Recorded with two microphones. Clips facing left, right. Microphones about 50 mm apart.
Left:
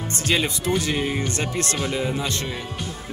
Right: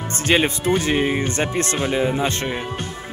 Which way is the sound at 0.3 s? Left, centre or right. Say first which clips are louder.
Right 5 dB; right.